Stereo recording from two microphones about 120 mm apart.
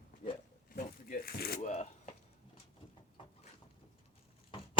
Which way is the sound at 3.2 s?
45° left (ahead or behind).